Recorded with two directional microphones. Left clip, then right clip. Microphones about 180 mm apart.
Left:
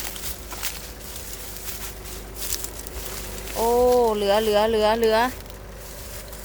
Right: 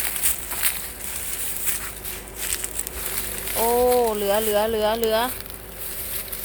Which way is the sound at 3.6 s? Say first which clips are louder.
Left 1 dB; 10° left (ahead or behind).